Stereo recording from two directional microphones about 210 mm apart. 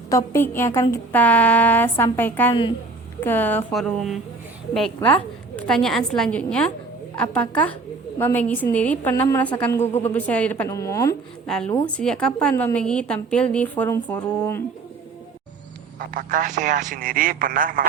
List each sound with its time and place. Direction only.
0.1 s a woman's voice: 15° left (ahead or behind)
5.5 s a woman's voice: 5° left (ahead or behind)
11.4 s a woman's voice: 5° left (ahead or behind)
16.0 s speech: 40° right (ahead or behind)